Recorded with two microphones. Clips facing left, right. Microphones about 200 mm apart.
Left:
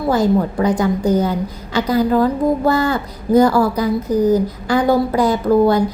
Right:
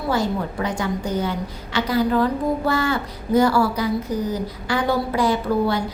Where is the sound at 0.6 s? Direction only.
40° left (ahead or behind).